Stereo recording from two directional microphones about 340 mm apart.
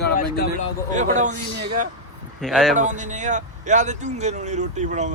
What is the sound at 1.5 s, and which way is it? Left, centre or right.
Speech, right.